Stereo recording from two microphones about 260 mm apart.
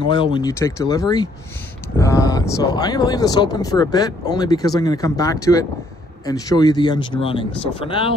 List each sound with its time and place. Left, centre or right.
0.0 s speech: centre